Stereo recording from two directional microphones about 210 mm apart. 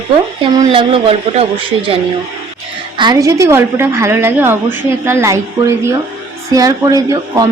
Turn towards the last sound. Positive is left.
turn(degrees=-15)  # may be behind; listen again after turning